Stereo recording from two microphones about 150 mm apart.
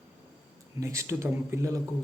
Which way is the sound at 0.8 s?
20° right (ahead or behind).